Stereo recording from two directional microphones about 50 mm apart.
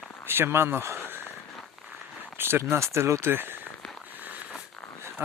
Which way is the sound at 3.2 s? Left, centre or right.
Right.